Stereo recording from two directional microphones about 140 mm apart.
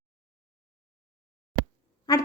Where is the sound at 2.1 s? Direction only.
25° left (ahead or behind).